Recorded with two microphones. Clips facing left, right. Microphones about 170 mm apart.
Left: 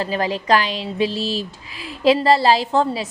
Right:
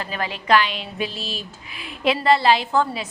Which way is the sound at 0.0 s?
35° left (ahead or behind).